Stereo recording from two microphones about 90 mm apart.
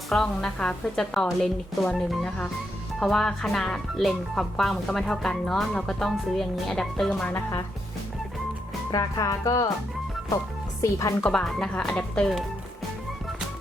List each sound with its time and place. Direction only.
0.1 s speech: 5° left (ahead or behind)
8.9 s speech: 40° left (ahead or behind)
10.8 s speech: 40° left (ahead or behind)
11.3 s speech: 5° left (ahead or behind)